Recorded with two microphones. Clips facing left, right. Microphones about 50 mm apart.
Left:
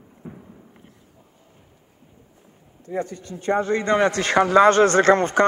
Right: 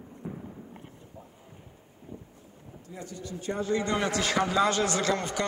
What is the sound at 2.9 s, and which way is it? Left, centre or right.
A man's voice, left.